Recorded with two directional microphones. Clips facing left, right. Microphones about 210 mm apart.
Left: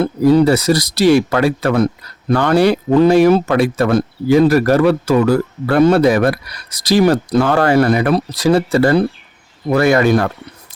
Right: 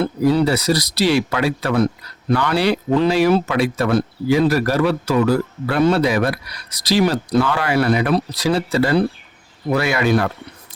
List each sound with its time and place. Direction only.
0.0 s speech: 45° left (ahead or behind)